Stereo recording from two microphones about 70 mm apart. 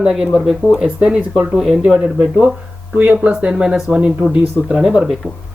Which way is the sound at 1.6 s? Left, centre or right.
Centre.